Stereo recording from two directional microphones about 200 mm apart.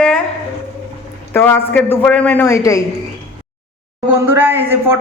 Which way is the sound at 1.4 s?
10° left (ahead or behind).